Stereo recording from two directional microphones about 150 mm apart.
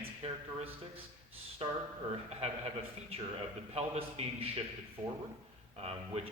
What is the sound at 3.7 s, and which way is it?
Speech, 40° right (ahead or behind).